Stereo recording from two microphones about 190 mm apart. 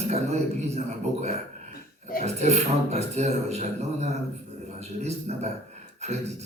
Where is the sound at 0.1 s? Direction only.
35° right (ahead or behind).